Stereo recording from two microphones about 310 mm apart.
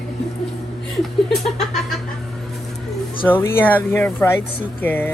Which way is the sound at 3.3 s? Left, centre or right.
Centre.